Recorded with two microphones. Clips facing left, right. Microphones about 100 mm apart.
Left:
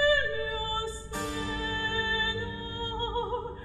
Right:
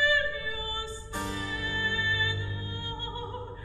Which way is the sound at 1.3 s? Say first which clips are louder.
Left 4 dB; 15° left (ahead or behind).